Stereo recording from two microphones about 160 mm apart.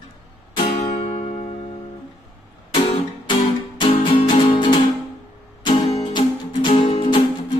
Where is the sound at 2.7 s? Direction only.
30° left (ahead or behind).